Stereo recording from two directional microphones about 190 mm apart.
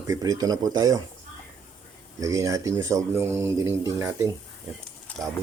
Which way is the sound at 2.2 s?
15° right (ahead or behind).